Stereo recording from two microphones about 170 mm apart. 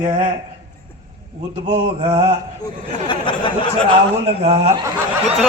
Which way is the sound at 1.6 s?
30° right (ahead or behind).